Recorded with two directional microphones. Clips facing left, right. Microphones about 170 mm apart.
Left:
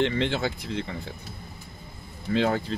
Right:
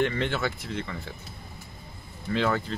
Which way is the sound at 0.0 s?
25° left (ahead or behind).